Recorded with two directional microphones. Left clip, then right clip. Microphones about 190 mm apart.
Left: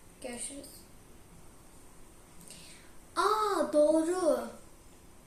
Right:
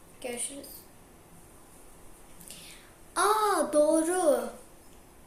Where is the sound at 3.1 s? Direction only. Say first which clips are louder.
Right 3 dB; 10° left (ahead or behind).